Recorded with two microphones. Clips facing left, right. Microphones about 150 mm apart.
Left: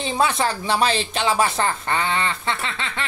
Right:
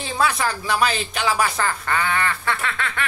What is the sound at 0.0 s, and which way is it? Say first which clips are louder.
Speech: left 1 dB; 20° left (ahead or behind).